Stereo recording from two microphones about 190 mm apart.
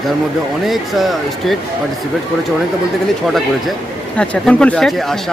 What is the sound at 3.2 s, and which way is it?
Speech, centre (ahead or behind).